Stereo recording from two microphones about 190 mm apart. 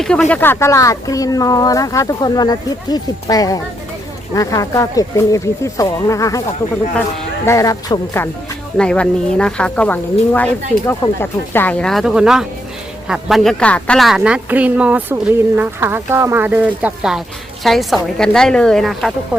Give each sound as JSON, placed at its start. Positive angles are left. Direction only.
{"t": 0.0, "sound": "speech", "side_deg": 5}
{"t": 7.4, "sound": "speech", "side_deg": 15}
{"t": 8.8, "sound": "speech", "side_deg": 5}